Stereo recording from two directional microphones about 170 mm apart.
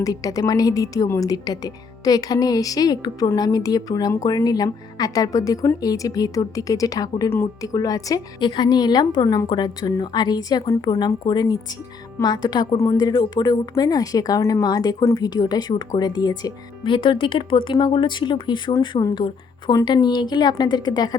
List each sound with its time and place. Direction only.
0.0 s a woman's voice: 20° left (ahead or behind)